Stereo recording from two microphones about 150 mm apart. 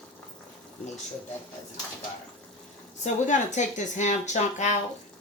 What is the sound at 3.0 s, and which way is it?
Speech, 55° left (ahead or behind).